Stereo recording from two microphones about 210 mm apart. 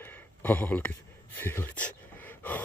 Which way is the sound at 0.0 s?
10° left (ahead or behind).